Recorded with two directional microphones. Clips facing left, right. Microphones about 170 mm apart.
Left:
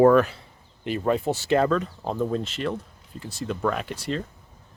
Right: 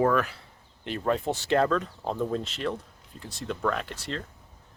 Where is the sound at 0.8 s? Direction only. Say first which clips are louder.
Left 3 dB; 5° left (ahead or behind).